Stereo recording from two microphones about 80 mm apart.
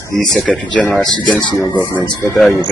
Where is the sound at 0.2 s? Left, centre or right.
Centre.